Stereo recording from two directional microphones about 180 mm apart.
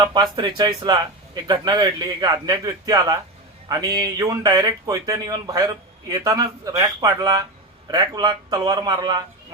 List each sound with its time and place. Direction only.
0.0 s speech: 25° right (ahead or behind)